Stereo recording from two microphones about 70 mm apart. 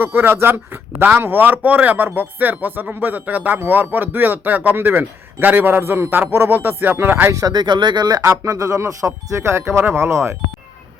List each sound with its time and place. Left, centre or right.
0.0 s speech: right
7.3 s speech: right
8.2 s speech: right